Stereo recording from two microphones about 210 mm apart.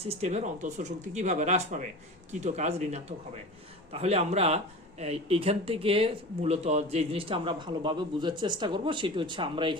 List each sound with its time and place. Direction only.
0.0 s speech: 30° right (ahead or behind)